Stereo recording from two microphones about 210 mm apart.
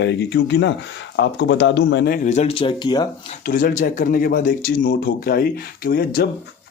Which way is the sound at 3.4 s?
40° left (ahead or behind).